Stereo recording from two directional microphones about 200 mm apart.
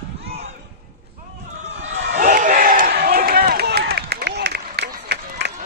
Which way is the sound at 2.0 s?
55° right (ahead or behind).